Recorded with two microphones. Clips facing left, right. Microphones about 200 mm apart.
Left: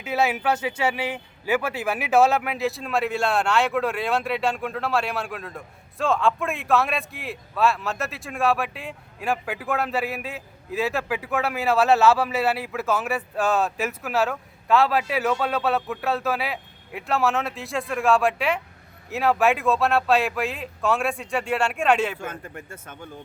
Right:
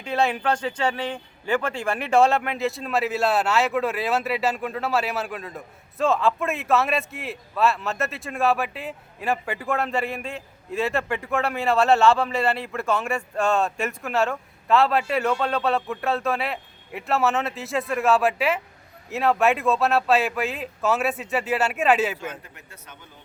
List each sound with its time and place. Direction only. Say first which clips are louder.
0.0 s a man's voice: even; 5° left (ahead or behind)
22.2 s a man's voice: left 1 dB; 50° left (ahead or behind)